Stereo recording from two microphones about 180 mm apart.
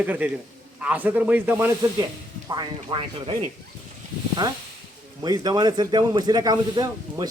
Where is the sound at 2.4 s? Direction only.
25° right (ahead or behind).